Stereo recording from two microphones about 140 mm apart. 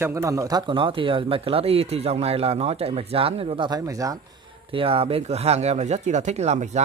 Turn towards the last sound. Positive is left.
turn(degrees=-55)  # may be behind; listen again after turning